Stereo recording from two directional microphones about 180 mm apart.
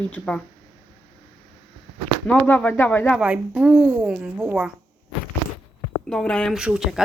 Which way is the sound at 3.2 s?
5° right (ahead or behind).